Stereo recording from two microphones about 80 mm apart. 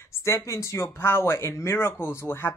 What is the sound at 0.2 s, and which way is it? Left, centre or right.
Speech, left.